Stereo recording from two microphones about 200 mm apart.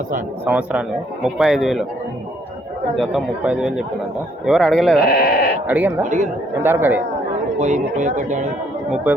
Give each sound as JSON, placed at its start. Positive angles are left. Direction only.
{"t": 0.4, "sound": "a man's voice", "side_deg": -5}
{"t": 2.9, "sound": "a man's voice", "side_deg": 0}
{"t": 5.0, "sound": "sheep", "side_deg": 50}
{"t": 5.6, "sound": "speech", "side_deg": -10}
{"t": 7.6, "sound": "speech", "side_deg": -40}